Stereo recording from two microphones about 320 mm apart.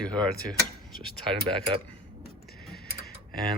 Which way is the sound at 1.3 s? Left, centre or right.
Centre.